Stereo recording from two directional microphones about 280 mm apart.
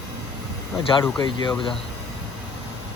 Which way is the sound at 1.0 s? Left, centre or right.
Centre.